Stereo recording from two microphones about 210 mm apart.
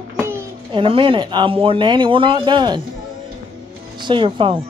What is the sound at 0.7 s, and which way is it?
Speech, 25° right (ahead or behind).